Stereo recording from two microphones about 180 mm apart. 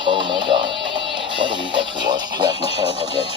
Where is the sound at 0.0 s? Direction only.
25° right (ahead or behind).